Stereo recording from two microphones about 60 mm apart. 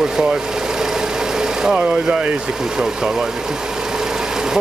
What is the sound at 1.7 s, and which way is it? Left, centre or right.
Speech, centre.